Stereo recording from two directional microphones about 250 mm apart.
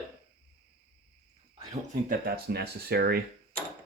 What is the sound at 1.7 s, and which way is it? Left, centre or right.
Speech, right.